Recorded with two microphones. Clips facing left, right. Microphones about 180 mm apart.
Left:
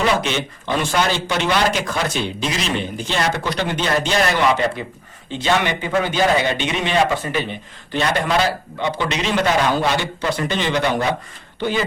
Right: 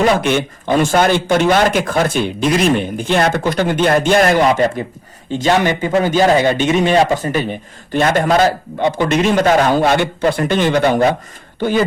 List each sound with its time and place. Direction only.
0.0 s speech: 55° right (ahead or behind)